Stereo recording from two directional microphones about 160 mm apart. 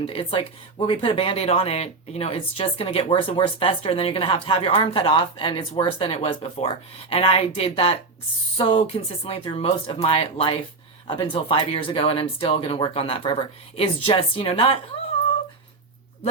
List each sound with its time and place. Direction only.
0.0 s speech: 35° left (ahead or behind)